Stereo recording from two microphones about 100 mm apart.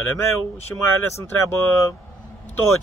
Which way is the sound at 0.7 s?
20° left (ahead or behind).